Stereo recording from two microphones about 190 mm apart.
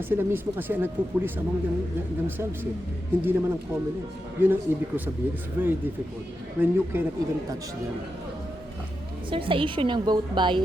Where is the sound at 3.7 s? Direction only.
15° right (ahead or behind).